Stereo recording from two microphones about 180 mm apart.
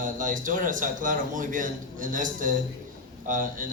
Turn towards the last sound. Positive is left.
turn(degrees=-50)  # may be behind; listen again after turning